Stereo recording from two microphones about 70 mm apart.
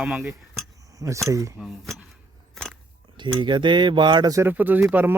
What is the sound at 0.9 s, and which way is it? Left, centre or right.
Speech, right.